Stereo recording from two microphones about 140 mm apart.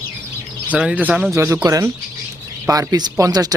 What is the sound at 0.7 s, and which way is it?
Speech, 10° right (ahead or behind).